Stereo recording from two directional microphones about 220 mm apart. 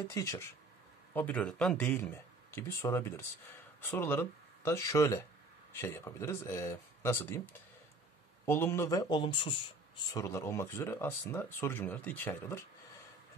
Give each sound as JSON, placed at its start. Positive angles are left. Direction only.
{"t": 0.1, "sound": "speech", "side_deg": 15}
{"t": 8.5, "sound": "speech", "side_deg": 10}
{"t": 10.1, "sound": "speech", "side_deg": 10}